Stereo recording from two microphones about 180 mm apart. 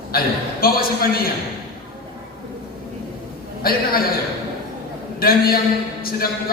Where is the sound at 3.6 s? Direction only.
55° left (ahead or behind).